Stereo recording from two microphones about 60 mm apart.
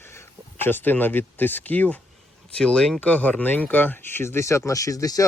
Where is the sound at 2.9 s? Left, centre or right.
Left.